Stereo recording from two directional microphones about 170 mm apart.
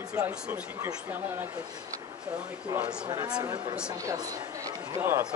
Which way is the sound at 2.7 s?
5° right (ahead or behind).